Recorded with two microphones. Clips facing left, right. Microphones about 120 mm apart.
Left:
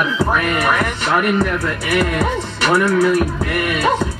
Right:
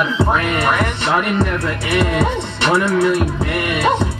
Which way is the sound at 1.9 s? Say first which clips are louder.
Right 1 dB; 25° right (ahead or behind).